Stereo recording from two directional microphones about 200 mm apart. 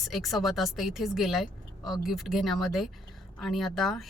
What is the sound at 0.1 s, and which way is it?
Speech, centre (ahead or behind).